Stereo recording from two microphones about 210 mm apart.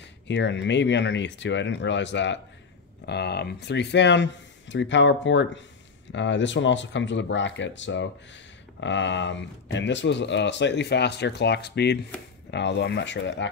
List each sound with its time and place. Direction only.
0.3 s speech: 55° left (ahead or behind)